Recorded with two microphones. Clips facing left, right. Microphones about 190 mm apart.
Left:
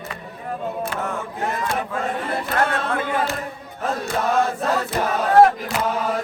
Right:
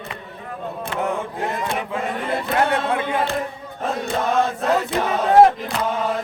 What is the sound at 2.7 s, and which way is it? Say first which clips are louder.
Speech: right 3 dB; 20° right (ahead or behind).